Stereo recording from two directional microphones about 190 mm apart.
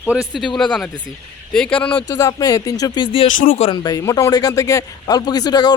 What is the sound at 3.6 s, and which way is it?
Speech, 20° left (ahead or behind).